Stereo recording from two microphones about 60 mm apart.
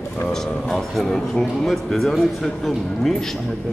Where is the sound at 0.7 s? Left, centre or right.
Centre.